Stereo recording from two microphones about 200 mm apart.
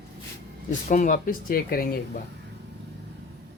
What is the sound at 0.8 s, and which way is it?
Speech, 40° left (ahead or behind).